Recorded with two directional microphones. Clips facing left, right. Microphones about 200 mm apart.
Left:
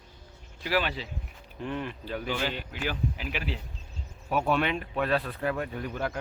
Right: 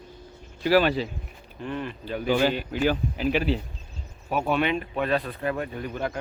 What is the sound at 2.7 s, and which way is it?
Speech, 35° right (ahead or behind).